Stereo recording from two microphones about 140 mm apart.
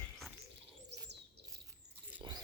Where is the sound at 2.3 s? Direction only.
30° right (ahead or behind).